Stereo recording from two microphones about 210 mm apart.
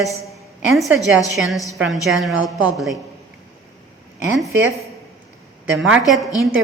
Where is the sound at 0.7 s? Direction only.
Centre (ahead or behind).